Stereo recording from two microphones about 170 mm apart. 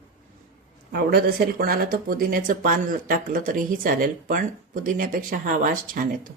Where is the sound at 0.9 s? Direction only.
65° right (ahead or behind).